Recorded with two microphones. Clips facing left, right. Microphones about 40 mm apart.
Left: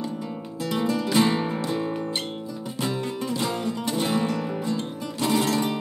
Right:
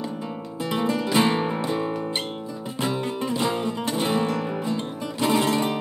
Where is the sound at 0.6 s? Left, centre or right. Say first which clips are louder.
Right 1 dB; centre.